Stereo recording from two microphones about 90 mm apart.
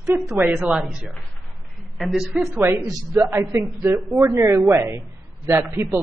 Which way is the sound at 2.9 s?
45° right (ahead or behind).